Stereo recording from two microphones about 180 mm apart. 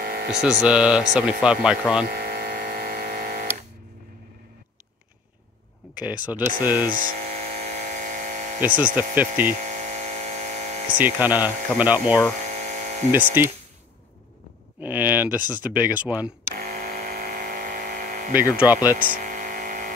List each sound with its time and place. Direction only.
0.0 s hum: 60° right (ahead or behind)
0.3 s speech: 5° right (ahead or behind)
2.0 s a sound: 60° right (ahead or behind)
6.2 s speech: 10° right (ahead or behind)
6.9 s hum: 45° right (ahead or behind)
8.5 s speech: 10° right (ahead or behind)
9.5 s a sound: 40° right (ahead or behind)
11.0 s speech: 10° right (ahead or behind)
12.4 s electric toothbrush: 40° right (ahead or behind)
13.1 s speech: 10° right (ahead or behind)
14.8 s speech: 10° right (ahead or behind)
16.5 s electric toothbrush: 55° right (ahead or behind)
18.3 s speech: 10° right (ahead or behind)
18.9 s a sound: 50° right (ahead or behind)